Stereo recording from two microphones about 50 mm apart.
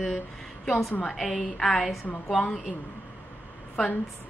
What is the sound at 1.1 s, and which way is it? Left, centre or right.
Speech, centre.